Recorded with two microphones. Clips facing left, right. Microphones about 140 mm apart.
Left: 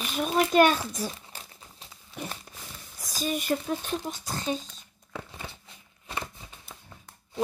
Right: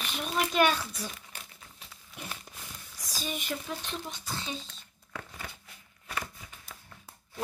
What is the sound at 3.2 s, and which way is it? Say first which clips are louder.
Speech: left 8 dB; 45° left (ahead or behind).